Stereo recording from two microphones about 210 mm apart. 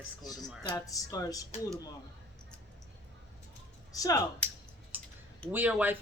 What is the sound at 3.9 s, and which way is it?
Speech, 15° left (ahead or behind).